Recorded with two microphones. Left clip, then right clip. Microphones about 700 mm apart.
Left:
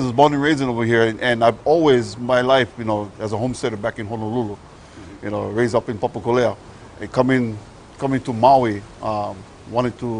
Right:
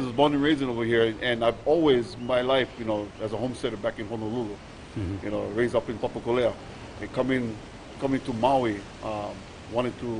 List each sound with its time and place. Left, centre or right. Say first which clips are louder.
0.0 s a man's voice: left 7 dB; left